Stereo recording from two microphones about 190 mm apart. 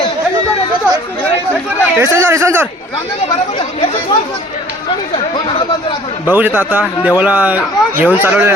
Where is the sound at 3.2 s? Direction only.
30° left (ahead or behind).